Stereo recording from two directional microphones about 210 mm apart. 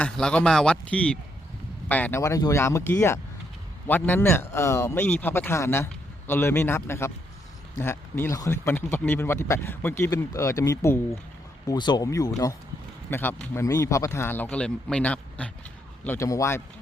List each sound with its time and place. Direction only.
0.0 s a man's voice: 5° left (ahead or behind)